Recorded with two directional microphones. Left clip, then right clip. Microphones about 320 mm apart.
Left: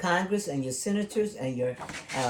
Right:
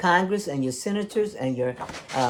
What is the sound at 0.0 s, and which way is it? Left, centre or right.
Speech, right.